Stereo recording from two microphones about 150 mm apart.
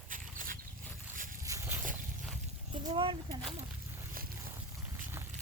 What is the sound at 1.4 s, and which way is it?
Boat, 20° right (ahead or behind).